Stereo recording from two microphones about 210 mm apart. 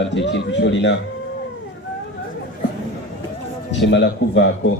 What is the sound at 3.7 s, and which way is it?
Speech, 60° left (ahead or behind).